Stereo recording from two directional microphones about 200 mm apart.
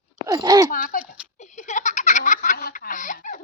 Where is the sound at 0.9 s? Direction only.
45° left (ahead or behind).